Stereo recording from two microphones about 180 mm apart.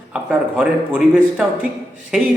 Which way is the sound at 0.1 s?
5° right (ahead or behind).